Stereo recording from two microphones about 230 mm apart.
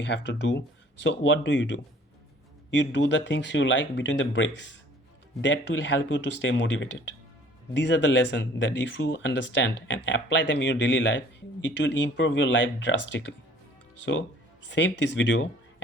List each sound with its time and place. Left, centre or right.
0.0 s speech: left
14.0 s speech: left